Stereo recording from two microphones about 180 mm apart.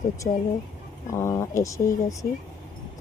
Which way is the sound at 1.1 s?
15° left (ahead or behind).